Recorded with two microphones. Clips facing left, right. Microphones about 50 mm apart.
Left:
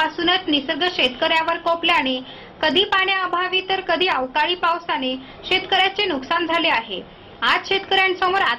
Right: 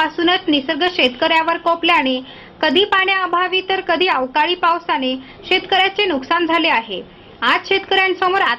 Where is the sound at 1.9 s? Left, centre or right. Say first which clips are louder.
Right 4 dB; right.